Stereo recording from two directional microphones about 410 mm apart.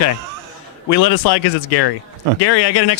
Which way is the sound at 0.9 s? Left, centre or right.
Left.